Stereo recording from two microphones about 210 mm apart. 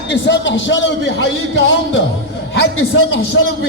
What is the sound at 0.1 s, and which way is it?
A man's voice, 60° left (ahead or behind).